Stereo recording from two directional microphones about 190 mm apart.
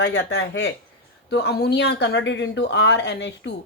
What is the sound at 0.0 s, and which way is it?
A woman's voice, 65° left (ahead or behind).